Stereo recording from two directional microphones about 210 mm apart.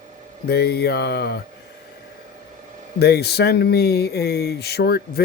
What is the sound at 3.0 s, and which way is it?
Speech, 50° left (ahead or behind).